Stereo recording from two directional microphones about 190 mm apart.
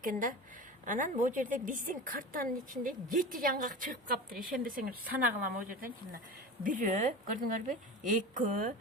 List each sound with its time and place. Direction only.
0.0 s a woman's voice: 45° right (ahead or behind)